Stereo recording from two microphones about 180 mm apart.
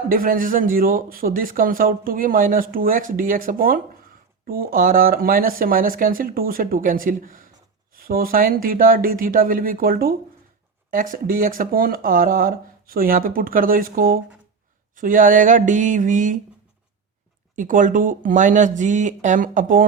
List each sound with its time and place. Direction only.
0.1 s speech: 50° right (ahead or behind)
17.5 s speech: 45° right (ahead or behind)